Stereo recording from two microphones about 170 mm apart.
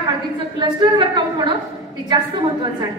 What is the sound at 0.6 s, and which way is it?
Speech, 25° right (ahead or behind).